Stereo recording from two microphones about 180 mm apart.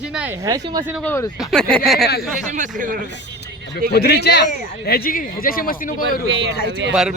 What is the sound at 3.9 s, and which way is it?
Speech, 65° left (ahead or behind).